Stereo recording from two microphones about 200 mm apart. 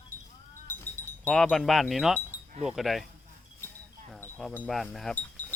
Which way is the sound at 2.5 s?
35° right (ahead or behind).